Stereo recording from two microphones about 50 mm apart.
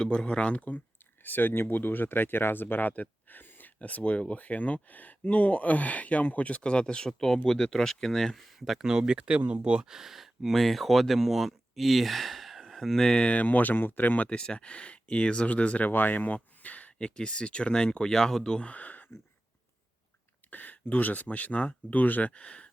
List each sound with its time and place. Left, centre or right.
0.0 s speech: centre
1.2 s speech: left
2.9 s a sound: left
3.8 s speech: left
7.1 s speech: centre; by 9.9 s right
9.9 s speech: centre
10.5 s speech: centre; by 14.3 s left
14.3 s speech: centre
15.9 s speech: left; by 18.6 s centre
18.6 s speech: left
20.5 s speech: left
22.3 s speech: left